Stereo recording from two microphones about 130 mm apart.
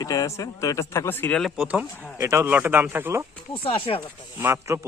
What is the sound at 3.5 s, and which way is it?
Speech, 45° left (ahead or behind).